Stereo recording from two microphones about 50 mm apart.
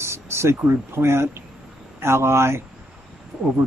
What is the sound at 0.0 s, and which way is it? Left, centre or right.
Speech, right.